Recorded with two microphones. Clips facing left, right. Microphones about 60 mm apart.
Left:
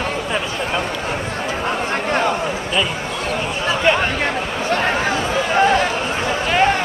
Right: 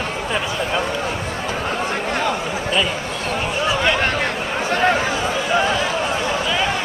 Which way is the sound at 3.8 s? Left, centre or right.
Left.